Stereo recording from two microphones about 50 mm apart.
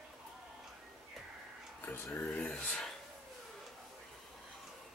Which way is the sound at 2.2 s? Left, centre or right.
Left.